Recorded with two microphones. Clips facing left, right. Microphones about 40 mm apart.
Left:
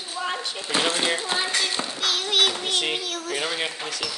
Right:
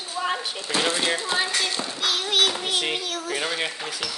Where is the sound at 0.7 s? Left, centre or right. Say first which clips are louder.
Even; centre.